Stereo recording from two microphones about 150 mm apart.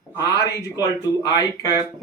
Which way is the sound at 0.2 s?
25° left (ahead or behind).